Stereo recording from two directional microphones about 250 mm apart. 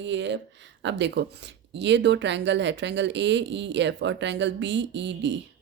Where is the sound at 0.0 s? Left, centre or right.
Right.